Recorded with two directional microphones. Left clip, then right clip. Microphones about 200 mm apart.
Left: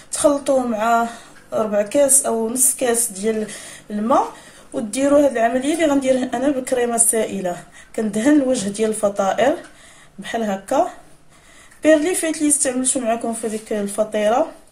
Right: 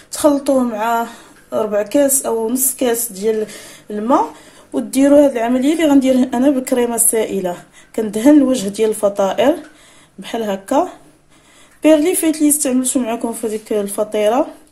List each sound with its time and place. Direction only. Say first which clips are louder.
0.1 s speech: right 2 dB; 35° right (ahead or behind)
4.9 s speech: right 4 dB; 35° right (ahead or behind)
11.8 s speech: right 3 dB; 35° right (ahead or behind)